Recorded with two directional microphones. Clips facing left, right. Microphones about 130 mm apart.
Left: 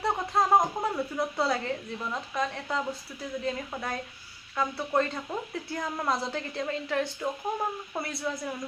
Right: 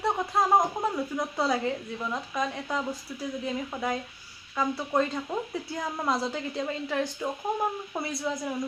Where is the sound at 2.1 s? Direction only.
10° right (ahead or behind).